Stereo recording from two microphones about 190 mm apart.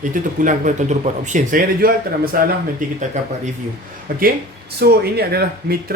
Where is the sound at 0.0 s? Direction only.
45° right (ahead or behind).